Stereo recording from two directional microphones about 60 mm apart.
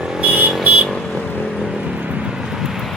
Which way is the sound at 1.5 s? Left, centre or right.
Centre.